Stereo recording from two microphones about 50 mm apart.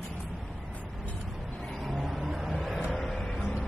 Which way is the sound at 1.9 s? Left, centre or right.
Centre.